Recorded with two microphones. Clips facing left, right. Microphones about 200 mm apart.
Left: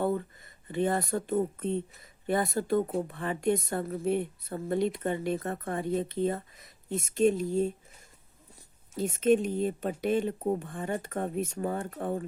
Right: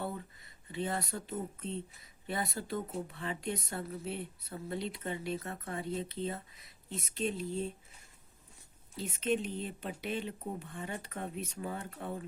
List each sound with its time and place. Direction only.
0.0 s speech: 50° left (ahead or behind)
9.0 s speech: 45° left (ahead or behind)